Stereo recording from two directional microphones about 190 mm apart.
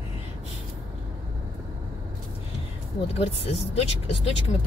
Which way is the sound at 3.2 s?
35° left (ahead or behind).